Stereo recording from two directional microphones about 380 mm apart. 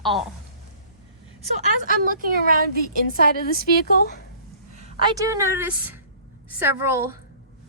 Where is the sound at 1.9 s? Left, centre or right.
Right.